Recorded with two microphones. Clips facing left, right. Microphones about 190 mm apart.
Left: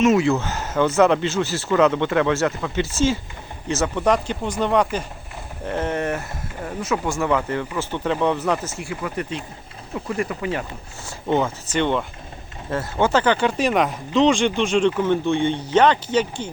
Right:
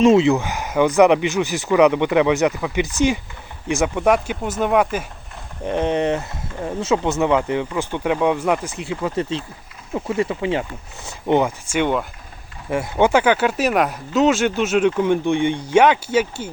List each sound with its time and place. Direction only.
0.0 s speech: 30° right (ahead or behind)
0.3 s speech: 15° right (ahead or behind)